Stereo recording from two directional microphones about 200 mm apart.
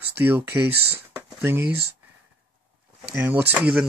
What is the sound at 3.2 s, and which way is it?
Speech, 10° right (ahead or behind).